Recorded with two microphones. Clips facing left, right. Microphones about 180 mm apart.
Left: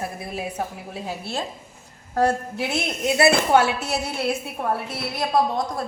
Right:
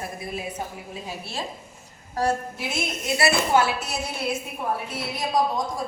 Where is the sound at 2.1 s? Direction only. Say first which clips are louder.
Left 3 dB; 60° left (ahead or behind).